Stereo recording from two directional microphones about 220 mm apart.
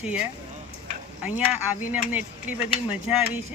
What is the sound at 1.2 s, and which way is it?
Speech, 5° right (ahead or behind).